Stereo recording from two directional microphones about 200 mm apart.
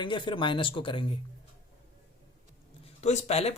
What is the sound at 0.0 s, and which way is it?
Speech, 25° left (ahead or behind).